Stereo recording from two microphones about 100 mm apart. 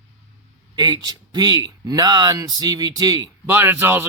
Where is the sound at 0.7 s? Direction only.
40° right (ahead or behind).